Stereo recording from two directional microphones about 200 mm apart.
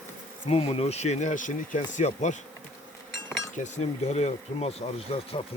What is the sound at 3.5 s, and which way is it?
Speech, 35° left (ahead or behind).